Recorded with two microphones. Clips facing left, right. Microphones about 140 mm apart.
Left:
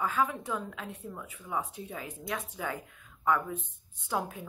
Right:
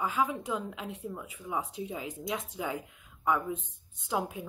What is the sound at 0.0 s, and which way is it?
A woman's voice, 15° right (ahead or behind).